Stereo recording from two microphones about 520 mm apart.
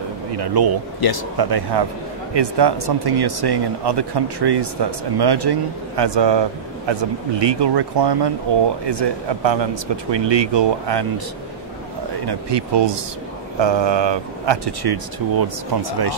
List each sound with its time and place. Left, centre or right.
0.3 s speech: right
1.0 s speech: left
1.4 s speech: right
12.3 s speech: right